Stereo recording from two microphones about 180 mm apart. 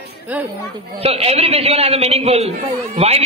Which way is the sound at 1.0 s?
35° right (ahead or behind).